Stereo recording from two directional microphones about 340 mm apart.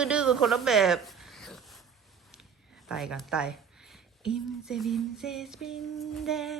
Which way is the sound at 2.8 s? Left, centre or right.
Centre.